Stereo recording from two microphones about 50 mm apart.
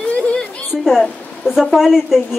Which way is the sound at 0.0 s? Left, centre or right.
Left.